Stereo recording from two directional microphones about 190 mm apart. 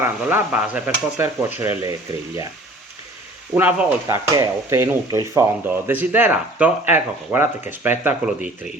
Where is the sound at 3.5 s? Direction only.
10° right (ahead or behind).